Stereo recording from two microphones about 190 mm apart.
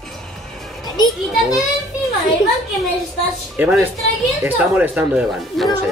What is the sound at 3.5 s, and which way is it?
Speech, 10° right (ahead or behind).